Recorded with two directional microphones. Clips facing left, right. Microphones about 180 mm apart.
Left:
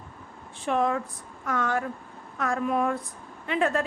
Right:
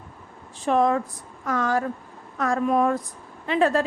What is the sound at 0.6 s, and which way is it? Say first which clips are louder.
A woman's voice: right 5 dB; 40° right (ahead or behind).